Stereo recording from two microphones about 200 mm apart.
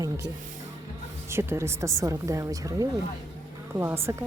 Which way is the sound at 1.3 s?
10° right (ahead or behind).